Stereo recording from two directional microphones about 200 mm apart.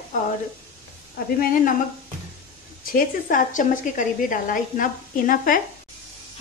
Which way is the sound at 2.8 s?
45° left (ahead or behind).